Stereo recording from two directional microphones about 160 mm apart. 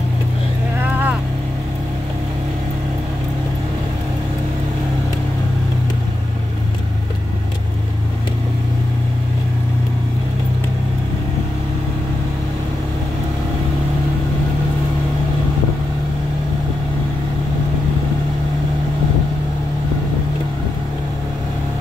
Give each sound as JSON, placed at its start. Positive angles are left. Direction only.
{"t": 0.7, "sound": "vehicle", "side_deg": -10}